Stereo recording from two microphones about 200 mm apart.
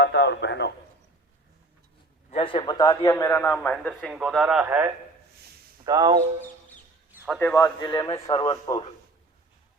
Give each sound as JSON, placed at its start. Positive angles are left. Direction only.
{"t": 0.0, "sound": "a man's voice", "side_deg": 60}
{"t": 2.3, "sound": "a man's voice", "side_deg": 25}
{"t": 5.8, "sound": "speech", "side_deg": -20}
{"t": 7.3, "sound": "a man's voice", "side_deg": 10}